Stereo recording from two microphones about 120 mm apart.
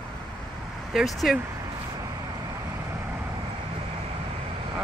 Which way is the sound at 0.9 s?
Centre (ahead or behind).